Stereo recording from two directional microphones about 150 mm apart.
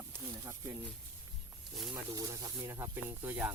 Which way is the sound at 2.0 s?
20° right (ahead or behind).